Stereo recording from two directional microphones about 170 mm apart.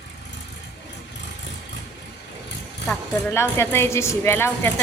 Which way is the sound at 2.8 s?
15° left (ahead or behind).